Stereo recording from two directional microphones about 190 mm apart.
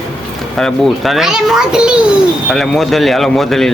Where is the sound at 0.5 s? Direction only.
Centre (ahead or behind).